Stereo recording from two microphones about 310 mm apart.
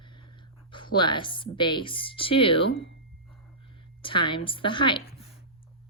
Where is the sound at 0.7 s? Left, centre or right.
Centre.